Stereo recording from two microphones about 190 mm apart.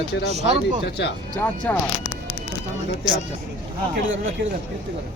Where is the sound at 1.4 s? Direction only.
10° left (ahead or behind).